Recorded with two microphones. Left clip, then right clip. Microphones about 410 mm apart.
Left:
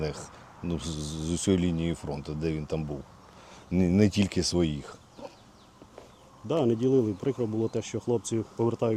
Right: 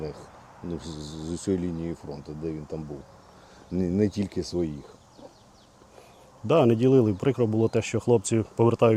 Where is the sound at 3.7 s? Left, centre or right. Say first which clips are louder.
Left 1 dB; left.